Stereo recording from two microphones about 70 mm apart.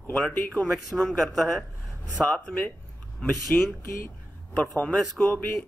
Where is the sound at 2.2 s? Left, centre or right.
Centre.